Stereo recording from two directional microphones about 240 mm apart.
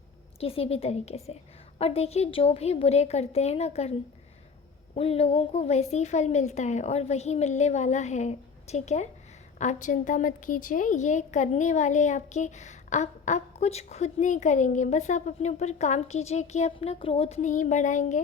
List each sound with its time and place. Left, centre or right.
0.3 s a woman's voice: left
4.9 s a woman's voice: left